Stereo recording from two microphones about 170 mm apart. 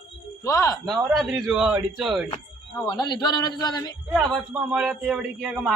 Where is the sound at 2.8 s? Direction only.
20° left (ahead or behind).